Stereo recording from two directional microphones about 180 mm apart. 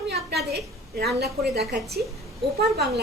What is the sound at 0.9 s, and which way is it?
A woman's voice, 65° right (ahead or behind).